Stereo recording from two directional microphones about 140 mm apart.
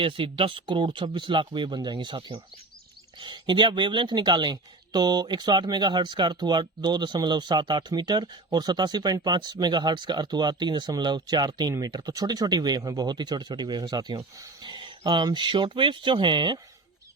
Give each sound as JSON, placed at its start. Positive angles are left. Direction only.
{"t": 0.0, "sound": "speech", "side_deg": -40}